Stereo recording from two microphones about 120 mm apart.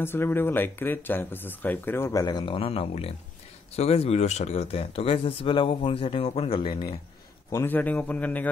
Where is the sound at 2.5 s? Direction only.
50° left (ahead or behind).